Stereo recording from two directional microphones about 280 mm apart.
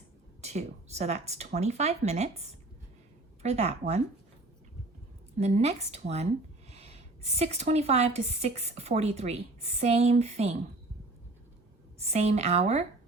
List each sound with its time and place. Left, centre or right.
0.4 s a woman's voice: right
3.4 s a woman's voice: right
5.4 s a woman's voice: right
11.9 s a woman's voice: right